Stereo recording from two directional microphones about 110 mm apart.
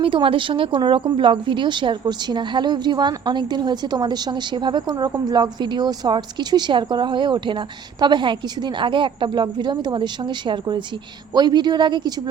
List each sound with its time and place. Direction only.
0.0 s a woman's voice: 50° right (ahead or behind)